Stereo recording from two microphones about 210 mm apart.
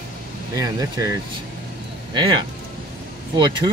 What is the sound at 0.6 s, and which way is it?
Speech, 15° right (ahead or behind).